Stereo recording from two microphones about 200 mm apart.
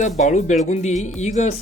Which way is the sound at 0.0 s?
35° left (ahead or behind).